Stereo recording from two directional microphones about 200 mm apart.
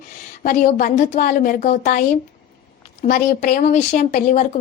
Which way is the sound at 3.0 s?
45° left (ahead or behind).